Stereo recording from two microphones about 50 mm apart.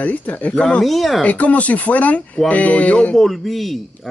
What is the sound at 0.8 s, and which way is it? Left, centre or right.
Speech, centre.